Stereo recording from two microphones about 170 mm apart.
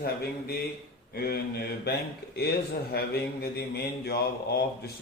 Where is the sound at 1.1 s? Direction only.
65° left (ahead or behind).